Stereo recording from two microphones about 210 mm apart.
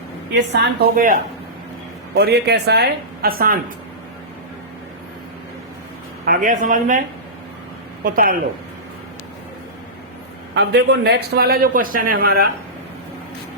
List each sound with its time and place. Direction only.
0.3 s speech: 55° right (ahead or behind)
2.1 s speech: 50° right (ahead or behind)
6.2 s speech: 40° right (ahead or behind)
8.0 s speech: 40° right (ahead or behind)
10.5 s speech: 55° right (ahead or behind)